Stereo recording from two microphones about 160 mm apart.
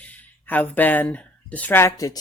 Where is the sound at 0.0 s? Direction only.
10° left (ahead or behind).